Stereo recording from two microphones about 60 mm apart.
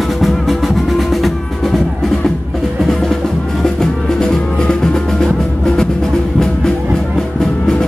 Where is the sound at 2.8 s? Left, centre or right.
Centre.